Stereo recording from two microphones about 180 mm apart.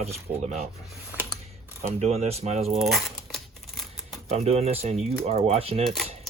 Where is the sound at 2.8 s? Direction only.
Centre (ahead or behind).